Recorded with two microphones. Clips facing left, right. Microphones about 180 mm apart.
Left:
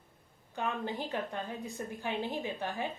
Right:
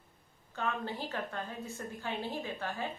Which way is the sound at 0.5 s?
15° left (ahead or behind).